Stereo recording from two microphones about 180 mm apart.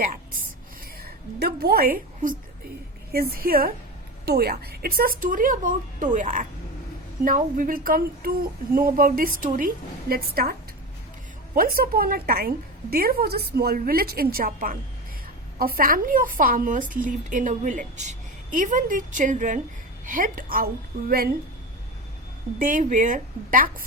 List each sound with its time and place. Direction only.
0.9 s a sound: 60° right (ahead or behind)
3.1 s a woman's voice: 55° right (ahead or behind)
22.5 s a woman's voice: 45° right (ahead or behind)